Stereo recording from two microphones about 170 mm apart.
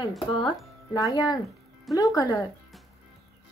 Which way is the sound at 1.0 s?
20° left (ahead or behind).